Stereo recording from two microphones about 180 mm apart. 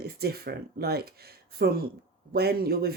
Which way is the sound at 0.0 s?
60° right (ahead or behind).